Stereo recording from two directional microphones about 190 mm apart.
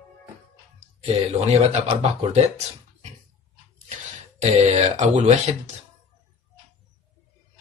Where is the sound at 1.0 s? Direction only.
35° right (ahead or behind).